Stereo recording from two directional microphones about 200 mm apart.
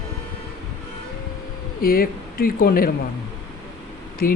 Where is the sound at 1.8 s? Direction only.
45° left (ahead or behind).